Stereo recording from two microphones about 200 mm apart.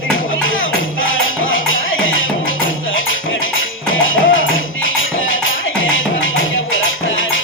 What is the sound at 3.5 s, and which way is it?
Music, 80° left.